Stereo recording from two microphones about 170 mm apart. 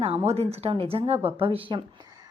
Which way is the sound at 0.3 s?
35° right (ahead or behind).